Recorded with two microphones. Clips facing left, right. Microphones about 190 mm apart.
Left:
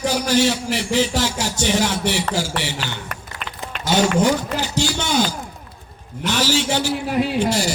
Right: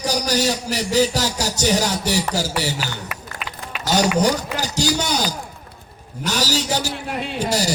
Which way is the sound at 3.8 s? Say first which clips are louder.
Left 1 dB; 40° right (ahead or behind).